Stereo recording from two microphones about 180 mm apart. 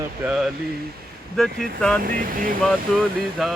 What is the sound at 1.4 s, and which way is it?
Speech, 5° left (ahead or behind).